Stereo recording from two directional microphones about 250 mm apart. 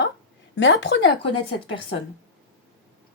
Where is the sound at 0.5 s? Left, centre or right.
Left.